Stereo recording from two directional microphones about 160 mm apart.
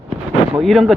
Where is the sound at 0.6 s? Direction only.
Centre (ahead or behind).